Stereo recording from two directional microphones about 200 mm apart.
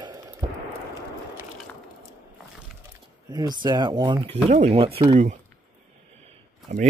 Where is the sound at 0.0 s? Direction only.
20° right (ahead or behind).